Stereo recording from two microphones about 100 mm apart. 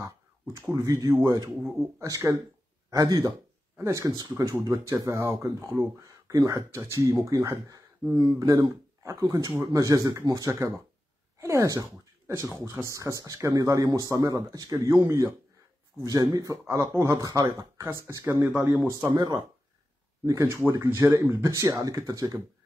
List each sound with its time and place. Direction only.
0.0 s speech: 35° right (ahead or behind)
16.6 s speech: 25° right (ahead or behind)
19.1 s speech: 40° right (ahead or behind)
20.2 s speech: 30° right (ahead or behind)